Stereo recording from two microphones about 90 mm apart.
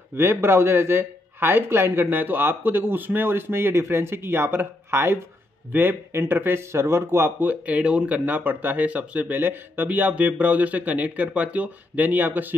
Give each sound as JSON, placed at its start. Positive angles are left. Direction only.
{"t": 0.1, "sound": "speech", "side_deg": -25}